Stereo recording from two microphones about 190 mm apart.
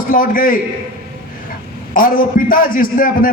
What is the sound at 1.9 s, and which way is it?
A man's voice, 45° left (ahead or behind).